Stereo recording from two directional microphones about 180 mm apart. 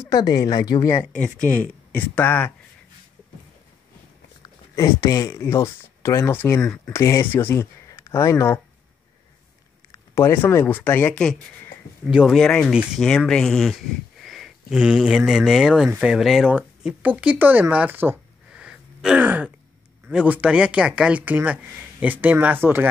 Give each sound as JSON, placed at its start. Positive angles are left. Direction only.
{"t": 0.1, "sound": "speech", "side_deg": 20}
{"t": 1.1, "sound": "speech", "side_deg": 5}
{"t": 4.7, "sound": "speech", "side_deg": 20}
{"t": 10.1, "sound": "speech", "side_deg": 15}